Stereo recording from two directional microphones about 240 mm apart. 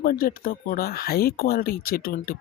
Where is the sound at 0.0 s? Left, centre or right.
Left.